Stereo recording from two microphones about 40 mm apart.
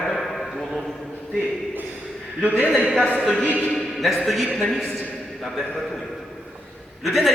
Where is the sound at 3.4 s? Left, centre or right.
Left.